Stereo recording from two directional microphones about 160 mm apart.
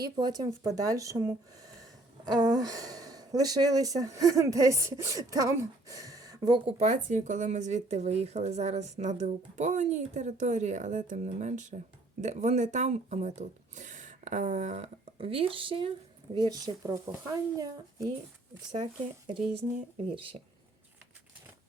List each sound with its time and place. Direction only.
0.0 s speech: 25° right (ahead or behind)
6.7 s speech: 45° right (ahead or behind); by 18.1 s 20° right (ahead or behind)